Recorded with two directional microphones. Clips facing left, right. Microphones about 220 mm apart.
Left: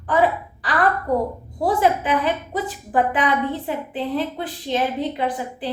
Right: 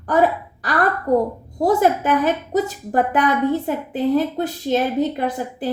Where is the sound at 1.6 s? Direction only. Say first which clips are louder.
Right 3 dB; 45° right (ahead or behind).